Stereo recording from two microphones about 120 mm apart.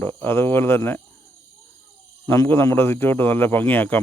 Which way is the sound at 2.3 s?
20° left (ahead or behind).